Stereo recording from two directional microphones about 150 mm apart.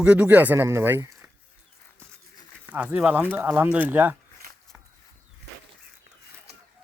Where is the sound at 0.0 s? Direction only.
10° right (ahead or behind).